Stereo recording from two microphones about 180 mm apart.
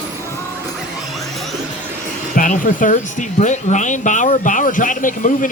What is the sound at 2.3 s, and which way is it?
Speech, 45° left (ahead or behind).